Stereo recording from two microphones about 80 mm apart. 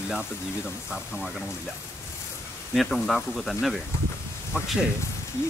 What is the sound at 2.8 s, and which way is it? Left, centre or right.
Speech, centre.